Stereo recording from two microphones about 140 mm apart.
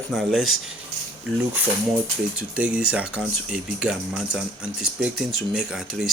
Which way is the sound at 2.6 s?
10° right (ahead or behind).